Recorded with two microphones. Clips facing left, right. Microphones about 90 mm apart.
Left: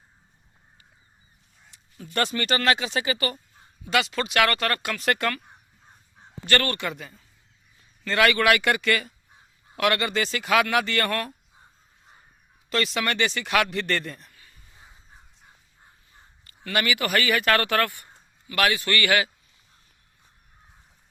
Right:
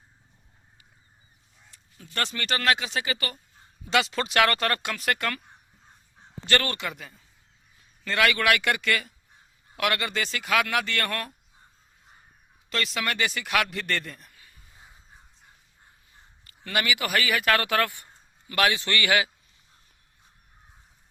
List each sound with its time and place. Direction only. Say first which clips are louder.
1.7 s speech: left 6 dB; 15° left (ahead or behind)
3.8 s speech: even; 30° right (ahead or behind)
4.8 s speech: left 2 dB; 15° right (ahead or behind)
5.0 s speech: left 3 dB; centre (ahead or behind)
6.4 s a man's voice: left 2 dB; 15° right (ahead or behind)
6.8 s speech: left 3 dB; centre (ahead or behind)
12.7 s speech: left 3 dB; centre (ahead or behind)
14.3 s a sound: left 1 dB; 15° right (ahead or behind)
16.7 s speech: left 2 dB; 15° right (ahead or behind)